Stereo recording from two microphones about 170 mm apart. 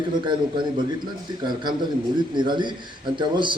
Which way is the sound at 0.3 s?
25° right (ahead or behind).